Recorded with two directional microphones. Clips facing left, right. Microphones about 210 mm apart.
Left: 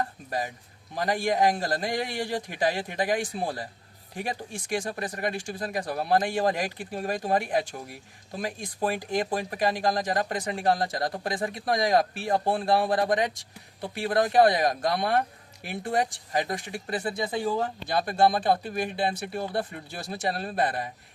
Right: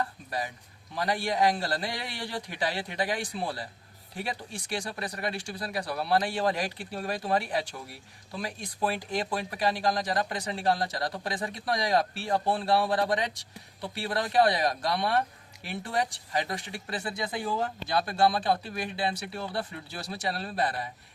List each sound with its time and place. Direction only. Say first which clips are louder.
0.3 s speech: left 3 dB; 45° left (ahead or behind)